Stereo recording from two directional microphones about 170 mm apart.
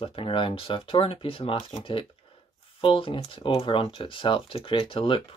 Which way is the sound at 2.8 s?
30° left (ahead or behind).